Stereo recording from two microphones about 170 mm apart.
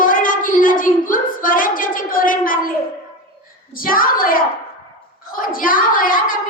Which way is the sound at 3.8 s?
55° left (ahead or behind).